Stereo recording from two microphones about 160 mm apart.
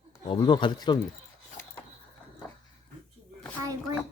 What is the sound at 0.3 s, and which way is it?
Speech, 30° left (ahead or behind).